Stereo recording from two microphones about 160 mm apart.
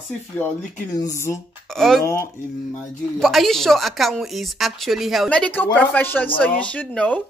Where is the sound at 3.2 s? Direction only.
Centre (ahead or behind).